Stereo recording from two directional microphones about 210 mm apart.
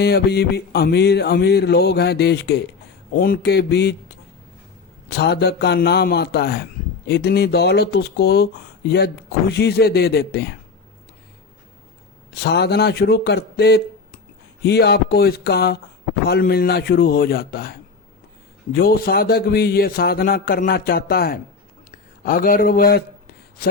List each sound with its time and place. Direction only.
0.0 s a man's voice: 50° left (ahead or behind)
5.0 s a man's voice: 50° left (ahead or behind)
12.3 s a man's voice: 50° left (ahead or behind)